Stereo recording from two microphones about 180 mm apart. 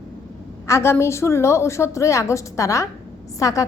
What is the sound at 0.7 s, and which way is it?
A woman's voice, 15° left (ahead or behind).